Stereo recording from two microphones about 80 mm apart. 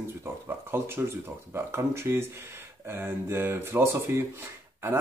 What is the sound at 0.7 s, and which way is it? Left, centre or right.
Speech, right.